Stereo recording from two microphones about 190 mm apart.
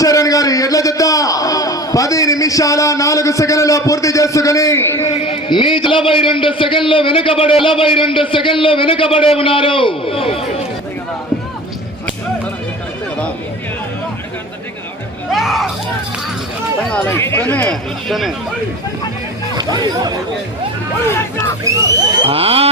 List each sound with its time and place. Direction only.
0.0 s a man's voice: 20° left (ahead or behind)
5.2 s a man's voice: 30° left (ahead or behind)
15.3 s speech: centre (ahead or behind)
16.9 s a man's voice: 15° left (ahead or behind)
19.5 s speech: 20° right (ahead or behind)
21.6 s speech: 15° right (ahead or behind)
22.3 s a sound: 30° right (ahead or behind)